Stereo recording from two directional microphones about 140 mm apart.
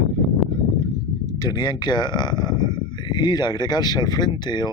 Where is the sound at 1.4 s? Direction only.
30° left (ahead or behind).